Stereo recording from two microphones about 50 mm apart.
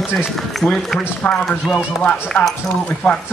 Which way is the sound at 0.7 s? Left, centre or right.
Centre.